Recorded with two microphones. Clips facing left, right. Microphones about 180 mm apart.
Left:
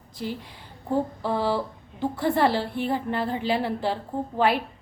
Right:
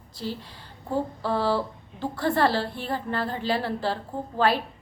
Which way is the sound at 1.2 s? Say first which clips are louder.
Even; 15° left (ahead or behind).